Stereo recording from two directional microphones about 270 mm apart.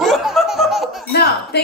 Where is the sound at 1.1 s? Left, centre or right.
Left.